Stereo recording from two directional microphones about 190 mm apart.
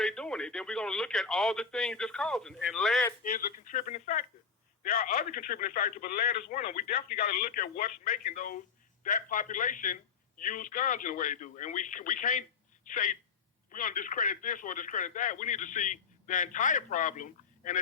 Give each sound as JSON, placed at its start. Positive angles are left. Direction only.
{"t": 0.0, "sound": "speech", "side_deg": 5}
{"t": 3.2, "sound": "a man's voice", "side_deg": 45}